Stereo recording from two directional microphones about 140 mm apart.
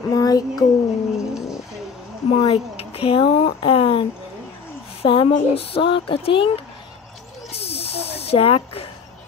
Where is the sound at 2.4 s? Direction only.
45° left (ahead or behind).